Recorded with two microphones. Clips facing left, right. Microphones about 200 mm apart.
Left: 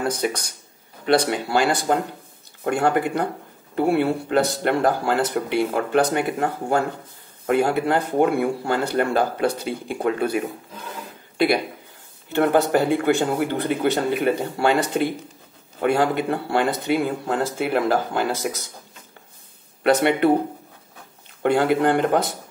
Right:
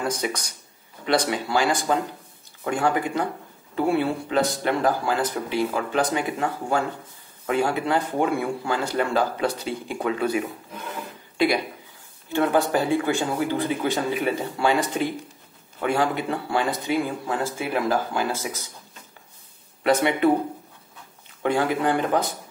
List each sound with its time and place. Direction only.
1.0 s speech: 60° left (ahead or behind)
15.8 s speech: 60° left (ahead or behind)
19.8 s speech: 65° left (ahead or behind)